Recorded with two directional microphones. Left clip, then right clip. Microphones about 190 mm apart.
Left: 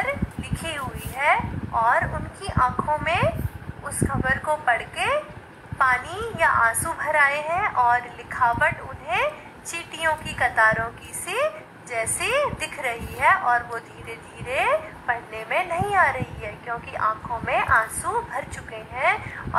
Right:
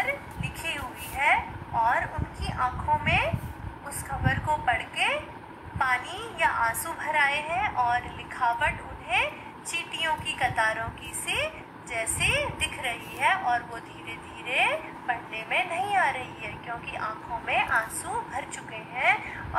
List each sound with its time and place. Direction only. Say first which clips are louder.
0.0 s dog: left 3 dB; 45° left (ahead or behind)
1.9 s a sound: left 5 dB; 40° left (ahead or behind)
5.8 s a woman's voice: left 6 dB; 45° left (ahead or behind)